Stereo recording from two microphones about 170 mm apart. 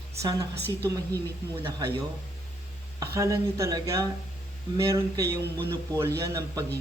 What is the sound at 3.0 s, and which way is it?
A man's voice, 20° right (ahead or behind).